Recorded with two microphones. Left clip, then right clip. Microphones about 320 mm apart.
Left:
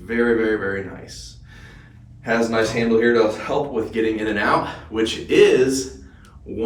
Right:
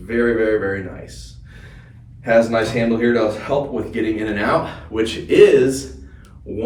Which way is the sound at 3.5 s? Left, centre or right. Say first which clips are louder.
Right 1 dB; centre.